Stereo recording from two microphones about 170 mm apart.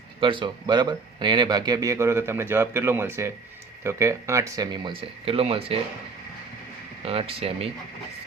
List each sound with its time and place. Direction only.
0.2 s speech: 30° right (ahead or behind)
7.0 s speech: 35° right (ahead or behind)